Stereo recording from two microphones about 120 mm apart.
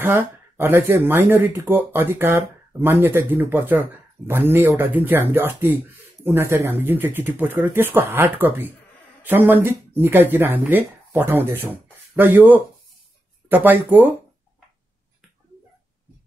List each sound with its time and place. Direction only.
0.0 s speech: 20° right (ahead or behind)